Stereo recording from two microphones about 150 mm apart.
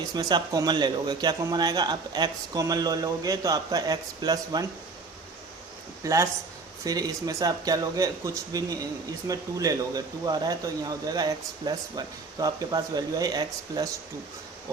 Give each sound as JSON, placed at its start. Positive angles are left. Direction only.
{"t": 0.1, "sound": "speech", "side_deg": -30}
{"t": 6.0, "sound": "speech", "side_deg": -20}